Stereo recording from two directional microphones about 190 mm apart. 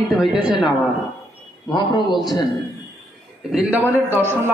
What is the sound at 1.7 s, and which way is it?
Speech, 25° left (ahead or behind).